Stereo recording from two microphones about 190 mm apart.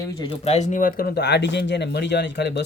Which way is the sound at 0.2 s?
30° left (ahead or behind).